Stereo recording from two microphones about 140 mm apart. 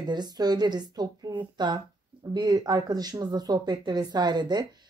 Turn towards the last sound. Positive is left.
turn(degrees=-30)  # may be behind; listen again after turning